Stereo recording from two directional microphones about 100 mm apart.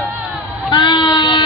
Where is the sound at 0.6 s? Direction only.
45° left (ahead or behind).